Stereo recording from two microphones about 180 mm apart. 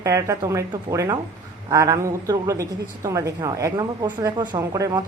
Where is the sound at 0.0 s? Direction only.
15° right (ahead or behind).